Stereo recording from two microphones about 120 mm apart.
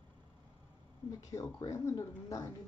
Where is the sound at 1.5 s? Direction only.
25° left (ahead or behind).